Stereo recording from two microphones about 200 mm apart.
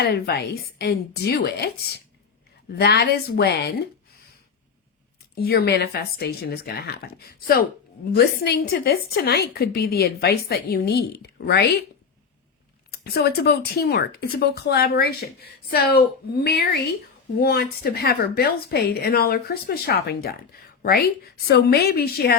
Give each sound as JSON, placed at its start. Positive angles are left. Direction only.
{"t": 0.0, "sound": "speech", "side_deg": 50}
{"t": 5.3, "sound": "speech", "side_deg": 50}
{"t": 12.9, "sound": "speech", "side_deg": 50}